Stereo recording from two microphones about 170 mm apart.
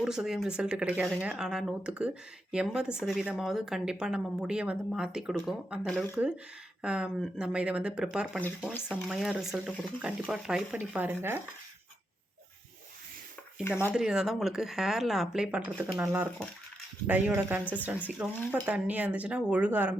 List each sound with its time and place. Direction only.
0.0 s speech: 5° right (ahead or behind)
13.7 s speech: 10° left (ahead or behind)
13.9 s speech: 5° right (ahead or behind)